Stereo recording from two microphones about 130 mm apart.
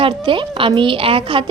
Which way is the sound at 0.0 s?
40° right (ahead or behind).